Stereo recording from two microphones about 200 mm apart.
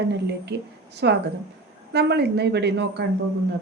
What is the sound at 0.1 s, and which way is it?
A woman's voice, 55° right (ahead or behind).